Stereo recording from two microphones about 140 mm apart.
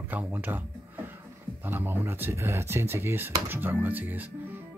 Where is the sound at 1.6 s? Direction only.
15° right (ahead or behind).